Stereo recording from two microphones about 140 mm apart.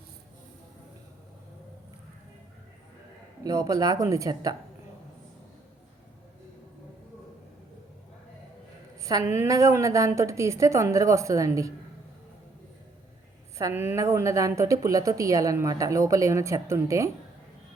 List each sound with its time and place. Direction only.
3.4 s a woman's voice: 25° right (ahead or behind)
9.0 s a woman's voice: 25° right (ahead or behind)
13.6 s a woman's voice: 20° right (ahead or behind)